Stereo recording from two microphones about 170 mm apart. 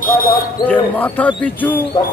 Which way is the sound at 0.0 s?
60° left (ahead or behind).